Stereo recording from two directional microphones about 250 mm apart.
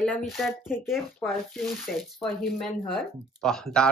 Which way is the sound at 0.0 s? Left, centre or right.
Centre.